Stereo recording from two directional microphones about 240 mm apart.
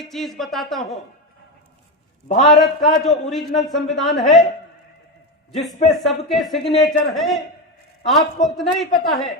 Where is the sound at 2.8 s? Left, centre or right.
Centre.